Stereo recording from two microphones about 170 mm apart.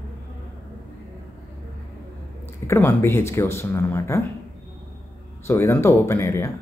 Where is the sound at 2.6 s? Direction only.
15° left (ahead or behind).